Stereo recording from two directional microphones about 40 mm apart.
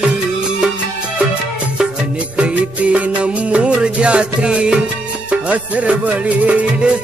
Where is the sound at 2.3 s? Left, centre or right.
Right.